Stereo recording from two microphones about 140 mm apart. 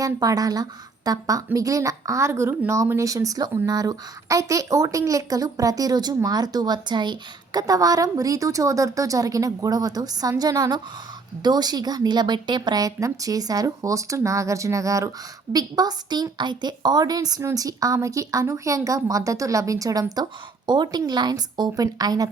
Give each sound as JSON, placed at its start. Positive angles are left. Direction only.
{"t": 0.0, "sound": "a woman's voice", "side_deg": -25}